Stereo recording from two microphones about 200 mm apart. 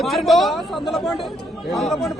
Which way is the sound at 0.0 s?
Centre (ahead or behind).